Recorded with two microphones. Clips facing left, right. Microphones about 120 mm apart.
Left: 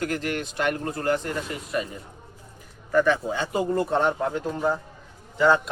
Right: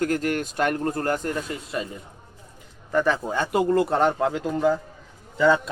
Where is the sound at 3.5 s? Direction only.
90° right.